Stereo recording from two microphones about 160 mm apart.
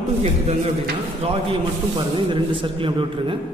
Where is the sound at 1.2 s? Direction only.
40° right (ahead or behind).